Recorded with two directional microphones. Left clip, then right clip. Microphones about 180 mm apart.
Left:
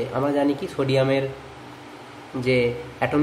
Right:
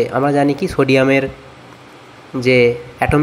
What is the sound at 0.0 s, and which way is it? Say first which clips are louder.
A man's voice: right 8 dB; 35° right (ahead or behind).